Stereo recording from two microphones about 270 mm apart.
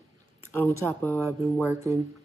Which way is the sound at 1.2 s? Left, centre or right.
Centre.